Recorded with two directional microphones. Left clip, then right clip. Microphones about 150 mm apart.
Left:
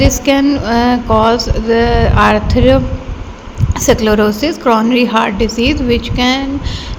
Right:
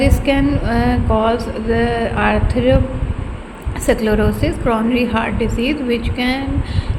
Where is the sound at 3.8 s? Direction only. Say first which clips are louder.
Left 5 dB; 30° left (ahead or behind).